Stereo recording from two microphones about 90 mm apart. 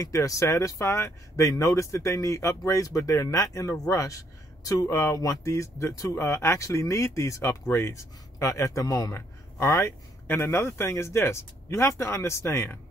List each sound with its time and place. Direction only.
0.0 s speech: 40° left (ahead or behind)